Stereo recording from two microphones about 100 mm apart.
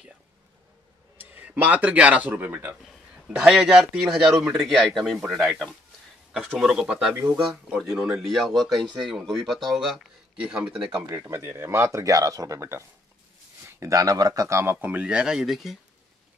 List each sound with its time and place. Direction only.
1.1 s speech: 20° right (ahead or behind)
11.1 s speech: 30° right (ahead or behind); by 15.8 s centre (ahead or behind)